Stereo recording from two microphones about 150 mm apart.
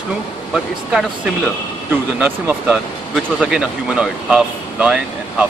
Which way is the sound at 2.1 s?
10° right (ahead or behind).